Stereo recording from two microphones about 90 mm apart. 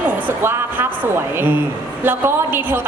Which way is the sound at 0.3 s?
25° right (ahead or behind).